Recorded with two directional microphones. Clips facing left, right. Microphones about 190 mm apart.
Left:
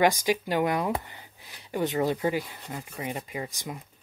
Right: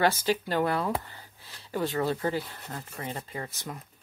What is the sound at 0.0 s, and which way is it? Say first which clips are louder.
Speech: left 2 dB; 15° left (ahead or behind).